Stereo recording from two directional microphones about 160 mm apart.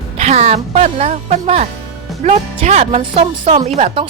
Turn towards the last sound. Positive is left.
turn(degrees=-35)  # may be behind; listen again after turning